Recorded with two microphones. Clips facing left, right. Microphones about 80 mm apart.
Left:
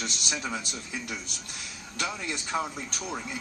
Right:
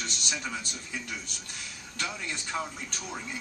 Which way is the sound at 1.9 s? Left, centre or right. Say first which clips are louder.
Left 3 dB; centre.